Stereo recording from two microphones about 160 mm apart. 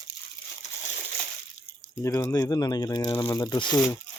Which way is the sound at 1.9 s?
20° left (ahead or behind).